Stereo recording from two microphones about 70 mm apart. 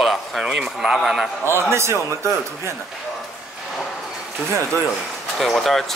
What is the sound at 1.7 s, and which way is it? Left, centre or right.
Speech, right.